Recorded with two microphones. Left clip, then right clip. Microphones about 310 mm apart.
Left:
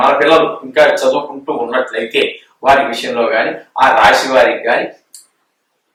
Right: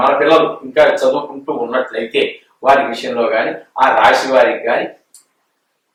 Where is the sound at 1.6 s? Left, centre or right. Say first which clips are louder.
Left 2 dB; centre.